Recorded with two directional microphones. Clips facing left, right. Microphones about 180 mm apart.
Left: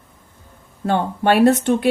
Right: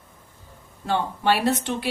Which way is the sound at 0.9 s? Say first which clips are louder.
Left 5 dB; 55° left (ahead or behind).